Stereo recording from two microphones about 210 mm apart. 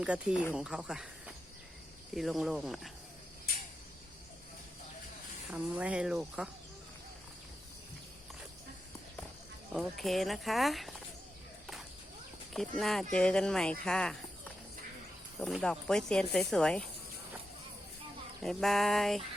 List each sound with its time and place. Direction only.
0.0 s speech: 5° right (ahead or behind)
2.1 s speech: centre (ahead or behind)
5.5 s speech: 5° right (ahead or behind)
9.7 s speech: centre (ahead or behind)
12.5 s speech: centre (ahead or behind)
15.4 s speech: centre (ahead or behind)
18.4 s speech: centre (ahead or behind)